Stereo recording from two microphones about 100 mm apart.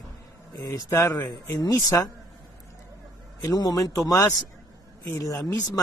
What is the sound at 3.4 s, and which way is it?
A man's voice, 40° left (ahead or behind).